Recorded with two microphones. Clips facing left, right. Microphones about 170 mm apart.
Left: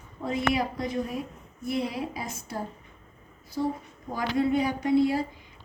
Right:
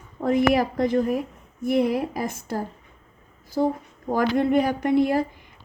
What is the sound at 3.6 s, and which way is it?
Speech, 70° right (ahead or behind).